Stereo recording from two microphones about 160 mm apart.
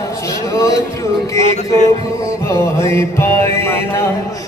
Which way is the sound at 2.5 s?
15° left (ahead or behind).